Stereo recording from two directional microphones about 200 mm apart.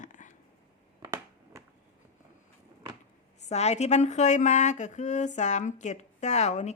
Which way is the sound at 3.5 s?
35° left (ahead or behind).